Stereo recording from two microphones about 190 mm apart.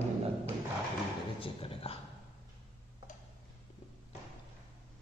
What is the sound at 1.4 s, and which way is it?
Speech, 30° left (ahead or behind).